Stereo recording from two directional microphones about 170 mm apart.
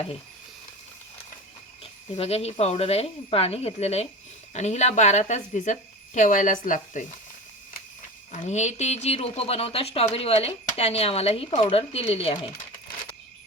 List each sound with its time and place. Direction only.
1.8 s a woman's voice: 35° left (ahead or behind)
8.3 s speech: 45° left (ahead or behind)